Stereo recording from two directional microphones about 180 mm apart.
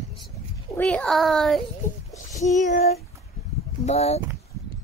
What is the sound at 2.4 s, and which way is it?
Child singing, 40° left (ahead or behind).